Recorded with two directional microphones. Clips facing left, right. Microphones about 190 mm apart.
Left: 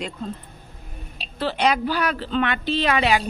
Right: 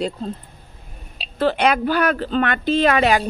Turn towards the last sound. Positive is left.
turn(degrees=-45)  # may be behind; listen again after turning